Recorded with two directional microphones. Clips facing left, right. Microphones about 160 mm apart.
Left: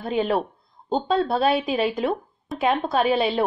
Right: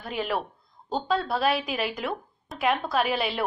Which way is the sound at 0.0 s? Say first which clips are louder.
Left 7 dB; 25° left (ahead or behind).